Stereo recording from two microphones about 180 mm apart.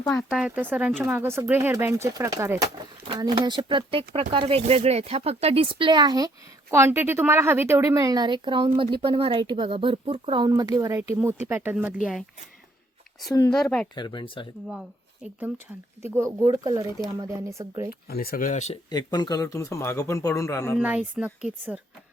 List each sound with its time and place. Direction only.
0.1 s speech: centre (ahead or behind)
13.5 s speech: 5° left (ahead or behind)
13.9 s speech: 25° left (ahead or behind)
14.7 s speech: 5° right (ahead or behind)
18.1 s speech: 55° left (ahead or behind); by 18.8 s 40° left (ahead or behind)
18.9 s speech: 25° left (ahead or behind)
20.7 s speech: 5° right (ahead or behind)